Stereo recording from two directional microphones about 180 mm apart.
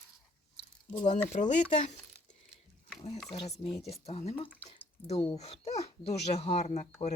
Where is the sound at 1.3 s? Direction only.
40° left (ahead or behind).